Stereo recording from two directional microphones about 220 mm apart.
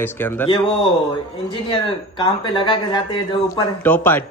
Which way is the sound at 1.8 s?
25° left (ahead or behind).